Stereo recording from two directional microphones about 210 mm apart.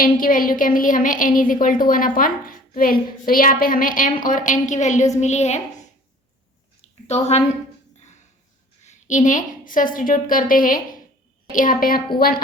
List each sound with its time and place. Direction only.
0.0 s a woman's voice: 40° left (ahead or behind)
7.1 s a woman's voice: 30° left (ahead or behind)
8.8 s a woman's voice: 35° left (ahead or behind)